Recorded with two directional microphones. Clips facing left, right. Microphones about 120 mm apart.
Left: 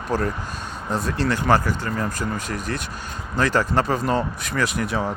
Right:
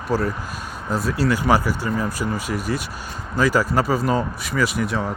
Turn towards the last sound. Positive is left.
turn(degrees=0)  # may be behind; listen again after turning